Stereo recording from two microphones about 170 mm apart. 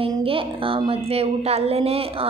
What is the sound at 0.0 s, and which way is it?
A woman's voice, 30° right (ahead or behind).